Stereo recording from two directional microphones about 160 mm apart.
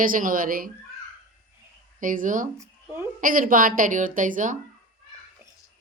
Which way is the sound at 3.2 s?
60° right (ahead or behind).